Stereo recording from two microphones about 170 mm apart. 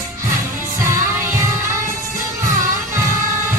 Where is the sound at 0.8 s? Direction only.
15° right (ahead or behind).